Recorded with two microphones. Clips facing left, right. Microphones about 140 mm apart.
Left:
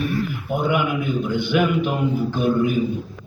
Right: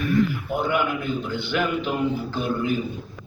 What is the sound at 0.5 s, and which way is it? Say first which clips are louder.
A man's voice: left 5 dB; 15° left (ahead or behind).